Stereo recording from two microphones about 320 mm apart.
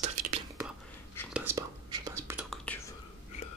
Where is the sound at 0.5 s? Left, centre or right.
Centre.